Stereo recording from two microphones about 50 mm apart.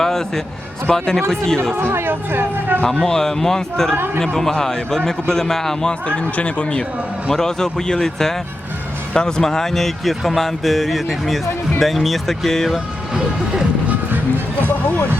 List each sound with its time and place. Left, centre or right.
0.0 s a man's voice: centre
1.7 s speech: right
3.0 s speech: centre
3.9 s speech: right
4.4 s speech: centre
5.9 s speech: left; by 12.8 s centre
13.8 s music: right